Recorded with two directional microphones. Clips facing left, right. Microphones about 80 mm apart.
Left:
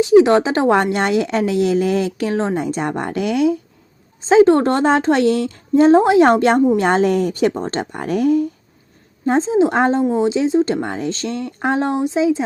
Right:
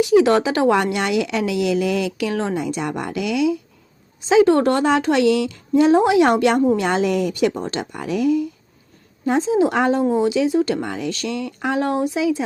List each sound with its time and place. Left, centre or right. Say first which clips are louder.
0.0 s speech: left 3 dB; left
2.6 s speech: left 3 dB; left
9.2 s speech: left 2 dB; left